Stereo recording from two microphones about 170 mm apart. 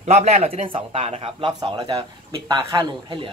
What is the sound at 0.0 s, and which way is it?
A man's voice, 40° right (ahead or behind).